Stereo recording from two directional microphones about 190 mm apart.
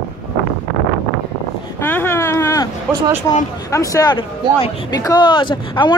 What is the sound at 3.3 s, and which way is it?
Speech, 20° left (ahead or behind).